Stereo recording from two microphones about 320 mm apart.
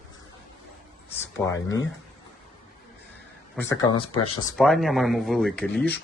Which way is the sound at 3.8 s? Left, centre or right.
Left.